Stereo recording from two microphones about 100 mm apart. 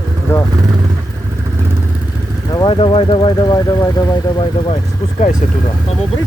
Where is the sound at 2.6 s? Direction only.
60° left (ahead or behind); by 4.2 s 35° left (ahead or behind).